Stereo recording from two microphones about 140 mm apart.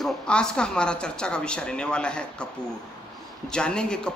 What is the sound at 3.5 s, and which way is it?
Speech, 5° left (ahead or behind).